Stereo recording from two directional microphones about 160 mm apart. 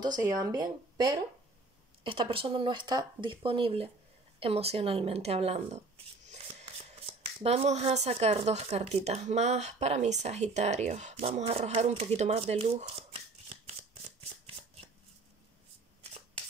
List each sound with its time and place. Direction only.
0.2 s speech: 25° right (ahead or behind); by 13.2 s 40° right (ahead or behind)